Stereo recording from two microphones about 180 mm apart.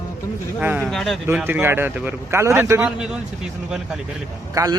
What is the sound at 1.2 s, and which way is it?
Speech, 10° right (ahead or behind).